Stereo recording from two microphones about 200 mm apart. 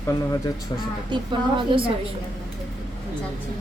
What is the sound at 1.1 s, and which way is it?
Speech, 25° right (ahead or behind).